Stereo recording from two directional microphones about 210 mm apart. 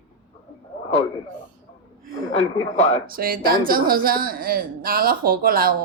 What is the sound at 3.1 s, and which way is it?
Speech, 45° right (ahead or behind).